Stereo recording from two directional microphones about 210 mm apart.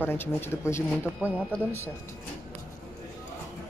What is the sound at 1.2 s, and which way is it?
Speech, 5° right (ahead or behind).